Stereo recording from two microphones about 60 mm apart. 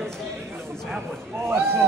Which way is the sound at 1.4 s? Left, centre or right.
Right.